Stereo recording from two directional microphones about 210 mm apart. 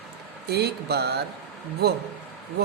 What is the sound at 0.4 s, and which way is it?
Speech, 50° right (ahead or behind).